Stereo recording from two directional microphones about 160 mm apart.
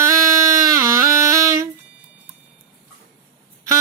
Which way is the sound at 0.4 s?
20° right (ahead or behind).